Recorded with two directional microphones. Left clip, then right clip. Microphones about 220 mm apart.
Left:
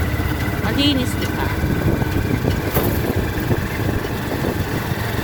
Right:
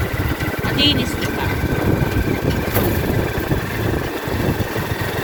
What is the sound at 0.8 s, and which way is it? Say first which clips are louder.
Speech: right 3 dB; 30° left (ahead or behind).